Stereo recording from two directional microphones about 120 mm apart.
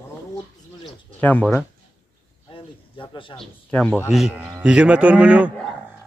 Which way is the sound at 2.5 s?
45° left (ahead or behind).